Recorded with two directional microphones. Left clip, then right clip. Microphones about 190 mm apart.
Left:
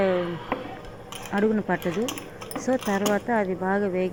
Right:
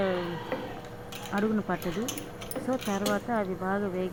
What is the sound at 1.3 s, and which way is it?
Speech, 20° left (ahead or behind).